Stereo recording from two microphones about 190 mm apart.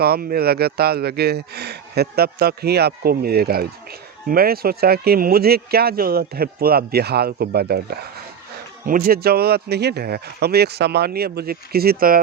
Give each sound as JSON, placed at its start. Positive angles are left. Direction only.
{"t": 0.0, "sound": "speech", "side_deg": -50}